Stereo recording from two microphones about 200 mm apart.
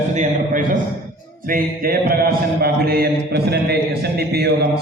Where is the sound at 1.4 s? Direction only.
45° right (ahead or behind).